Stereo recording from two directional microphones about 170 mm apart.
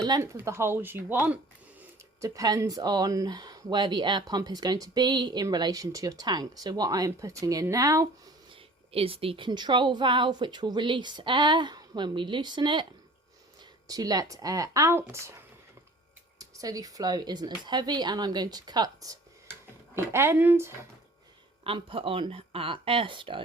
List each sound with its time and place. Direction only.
0.2 s speech: 15° right (ahead or behind)
8.9 s speech: 35° right (ahead or behind); by 15.4 s 15° right (ahead or behind)
16.4 s speech: 20° right (ahead or behind)
21.6 s speech: 35° right (ahead or behind)